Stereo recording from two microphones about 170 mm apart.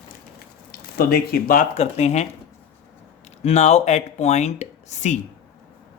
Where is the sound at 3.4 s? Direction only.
40° left (ahead or behind).